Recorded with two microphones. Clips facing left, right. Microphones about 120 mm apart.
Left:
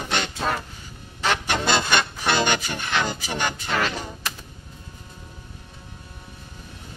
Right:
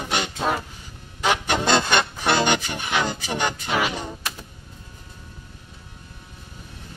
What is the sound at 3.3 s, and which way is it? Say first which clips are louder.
Music: right 2 dB; 15° right (ahead or behind).